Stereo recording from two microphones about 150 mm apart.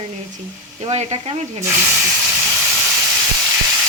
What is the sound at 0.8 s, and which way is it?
Speech, 50° right (ahead or behind).